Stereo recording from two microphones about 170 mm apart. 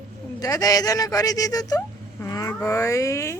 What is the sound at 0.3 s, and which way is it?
Speech, 20° left (ahead or behind).